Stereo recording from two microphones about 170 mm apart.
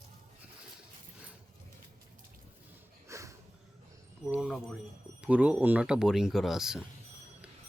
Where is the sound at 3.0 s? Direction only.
15° right (ahead or behind).